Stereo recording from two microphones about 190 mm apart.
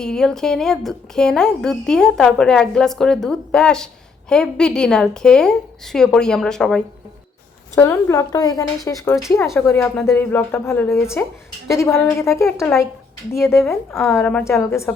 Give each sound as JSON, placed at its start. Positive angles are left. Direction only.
{"t": 0.0, "sound": "a woman's voice", "side_deg": 5}
{"t": 13.6, "sound": "a woman's voice", "side_deg": 0}